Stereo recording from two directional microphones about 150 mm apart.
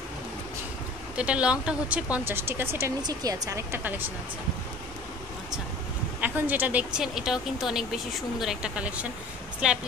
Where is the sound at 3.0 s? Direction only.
25° right (ahead or behind).